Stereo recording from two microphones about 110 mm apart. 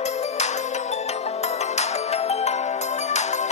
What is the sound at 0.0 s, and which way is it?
Music, 85° left.